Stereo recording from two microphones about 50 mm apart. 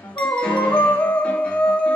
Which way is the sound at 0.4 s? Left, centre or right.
Left.